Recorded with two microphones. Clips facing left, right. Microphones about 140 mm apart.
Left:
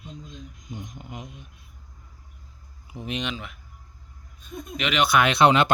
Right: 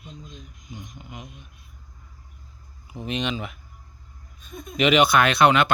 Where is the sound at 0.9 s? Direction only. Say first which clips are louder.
Left 2 dB; 35° left (ahead or behind).